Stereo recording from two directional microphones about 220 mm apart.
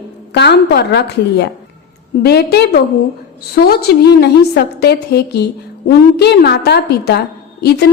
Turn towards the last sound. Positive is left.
turn(degrees=50)  # may be behind; listen again after turning